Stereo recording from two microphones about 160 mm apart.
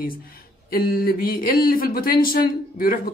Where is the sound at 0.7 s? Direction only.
70° left (ahead or behind).